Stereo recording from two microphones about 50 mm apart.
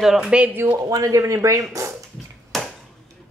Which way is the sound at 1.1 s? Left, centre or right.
Right.